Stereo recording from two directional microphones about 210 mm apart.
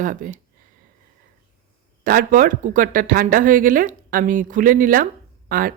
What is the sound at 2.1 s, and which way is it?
Speech, 45° right (ahead or behind).